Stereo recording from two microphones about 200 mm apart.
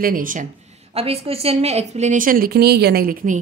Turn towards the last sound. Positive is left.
turn(degrees=-45)  # may be behind; listen again after turning